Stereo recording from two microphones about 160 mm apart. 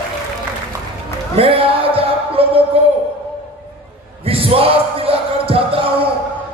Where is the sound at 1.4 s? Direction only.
35° right (ahead or behind).